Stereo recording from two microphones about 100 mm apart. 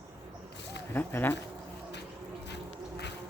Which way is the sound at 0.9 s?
20° left (ahead or behind).